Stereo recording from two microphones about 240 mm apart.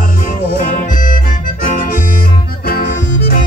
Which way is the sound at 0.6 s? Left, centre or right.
Left.